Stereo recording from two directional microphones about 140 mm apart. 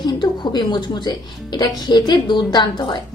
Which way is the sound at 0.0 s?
30° left (ahead or behind).